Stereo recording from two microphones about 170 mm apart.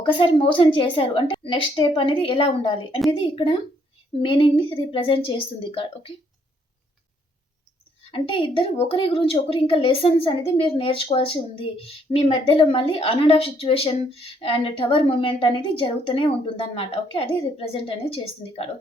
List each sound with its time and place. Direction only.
0.0 s a woman's voice: 30° left (ahead or behind)
8.1 s a woman's voice: 30° left (ahead or behind)